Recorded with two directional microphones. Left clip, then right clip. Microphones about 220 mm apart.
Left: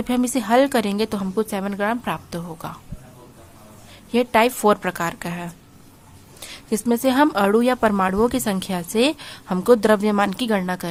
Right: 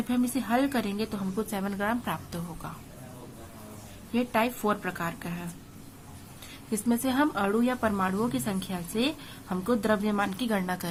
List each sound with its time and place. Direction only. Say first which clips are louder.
0.1 s a woman's voice: left 10 dB; 40° left (ahead or behind)
4.1 s a woman's voice: left 10 dB; 45° left (ahead or behind)
6.5 s a woman's voice: left 8 dB; 40° left (ahead or behind)